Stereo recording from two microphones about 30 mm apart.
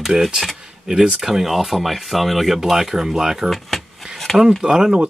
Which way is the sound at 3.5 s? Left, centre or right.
Centre.